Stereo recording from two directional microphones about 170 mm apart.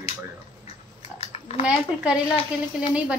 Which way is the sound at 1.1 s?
35° left (ahead or behind).